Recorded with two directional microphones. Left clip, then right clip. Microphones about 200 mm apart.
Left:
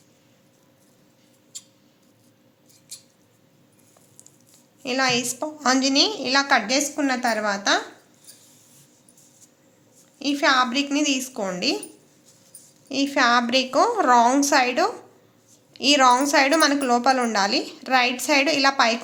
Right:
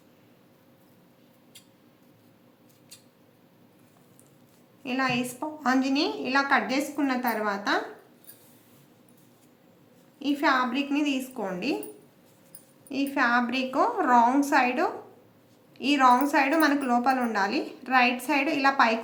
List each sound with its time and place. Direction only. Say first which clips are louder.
4.8 s a woman's voice: left 6 dB; 45° left (ahead or behind)
10.2 s a woman's voice: left 5 dB; 50° left (ahead or behind)
12.9 s a woman's voice: left 5 dB; 40° left (ahead or behind)